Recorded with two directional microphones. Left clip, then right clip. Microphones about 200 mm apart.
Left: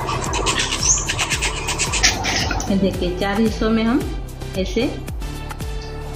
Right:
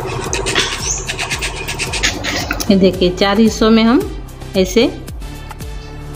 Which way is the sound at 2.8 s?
50° right (ahead or behind).